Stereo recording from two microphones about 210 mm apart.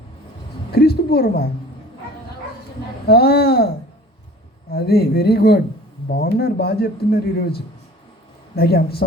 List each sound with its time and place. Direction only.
0.7 s a man's voice: 50° left (ahead or behind)
3.1 s a man's voice: 50° left (ahead or behind)
4.7 s a man's voice: 50° left (ahead or behind)